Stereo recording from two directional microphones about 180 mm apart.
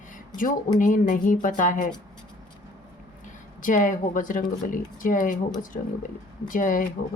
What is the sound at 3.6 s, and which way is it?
Speech, 45° left (ahead or behind).